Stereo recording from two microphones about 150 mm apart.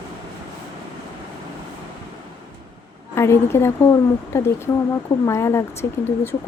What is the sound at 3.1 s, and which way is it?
A woman's voice, 15° left (ahead or behind).